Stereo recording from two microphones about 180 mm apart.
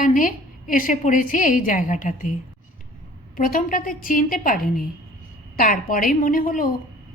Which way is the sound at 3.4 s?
50° left (ahead or behind).